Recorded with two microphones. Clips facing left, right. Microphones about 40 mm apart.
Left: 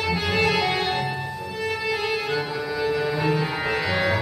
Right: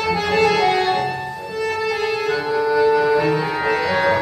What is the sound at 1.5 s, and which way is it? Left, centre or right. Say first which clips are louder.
Music: right 5 dB; centre.